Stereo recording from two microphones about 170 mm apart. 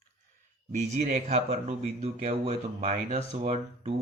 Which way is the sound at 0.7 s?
40° right (ahead or behind).